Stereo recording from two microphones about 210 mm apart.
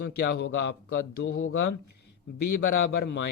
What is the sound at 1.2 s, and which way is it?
Speech, 75° left (ahead or behind).